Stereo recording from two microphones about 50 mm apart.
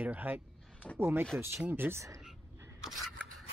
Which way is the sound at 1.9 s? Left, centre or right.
Right.